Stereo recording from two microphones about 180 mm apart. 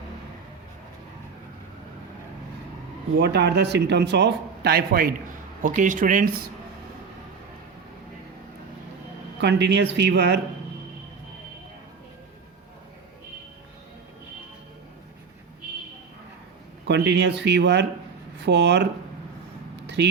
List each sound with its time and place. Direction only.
3.2 s speech: 70° right (ahead or behind)
5.6 s speech: 45° right (ahead or behind)
9.4 s speech: 70° right (ahead or behind)
16.8 s speech: 75° right (ahead or behind)
20.0 s speech: 70° right (ahead or behind)